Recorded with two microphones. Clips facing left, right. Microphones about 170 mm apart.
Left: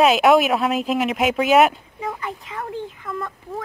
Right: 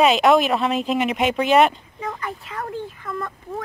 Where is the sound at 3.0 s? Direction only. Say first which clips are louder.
Even; centre (ahead or behind).